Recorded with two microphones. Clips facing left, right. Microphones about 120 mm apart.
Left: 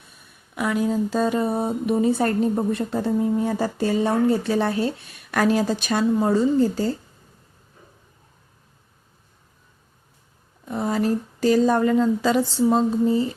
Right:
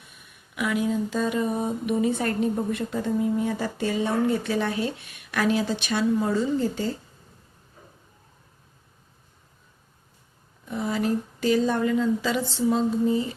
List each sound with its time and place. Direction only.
0.5 s speech: 40° left (ahead or behind)
10.7 s a woman's voice: 40° left (ahead or behind)